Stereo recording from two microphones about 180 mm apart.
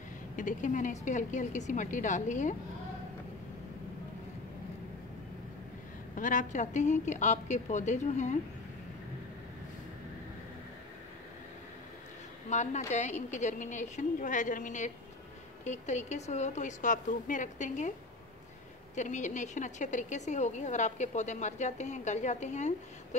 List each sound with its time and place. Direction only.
0.4 s a woman's voice: 45° left (ahead or behind)
6.1 s a woman's voice: 45° left (ahead or behind)
12.4 s a woman's voice: 40° left (ahead or behind)
18.9 s a woman's voice: 40° left (ahead or behind)